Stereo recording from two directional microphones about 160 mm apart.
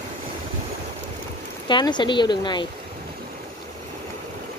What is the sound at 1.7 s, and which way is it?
Speech, 30° left (ahead or behind).